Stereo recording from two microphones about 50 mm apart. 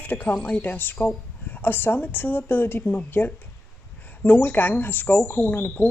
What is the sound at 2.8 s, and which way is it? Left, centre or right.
Speech, left.